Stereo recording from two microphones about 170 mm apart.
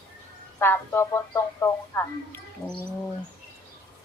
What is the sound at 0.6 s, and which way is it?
A woman's voice, 15° left (ahead or behind).